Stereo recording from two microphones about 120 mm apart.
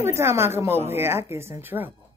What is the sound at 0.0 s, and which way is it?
A woman's voice, 20° right (ahead or behind).